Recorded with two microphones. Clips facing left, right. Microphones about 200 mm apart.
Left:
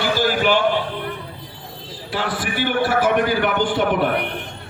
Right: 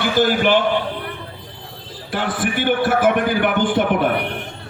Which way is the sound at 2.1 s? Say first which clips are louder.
Right 2 dB; 55° right (ahead or behind).